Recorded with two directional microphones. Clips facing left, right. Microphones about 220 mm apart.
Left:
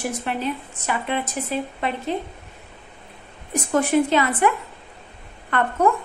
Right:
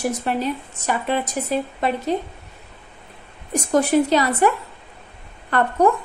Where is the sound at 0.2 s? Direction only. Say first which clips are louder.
Right 3 dB; 40° right (ahead or behind).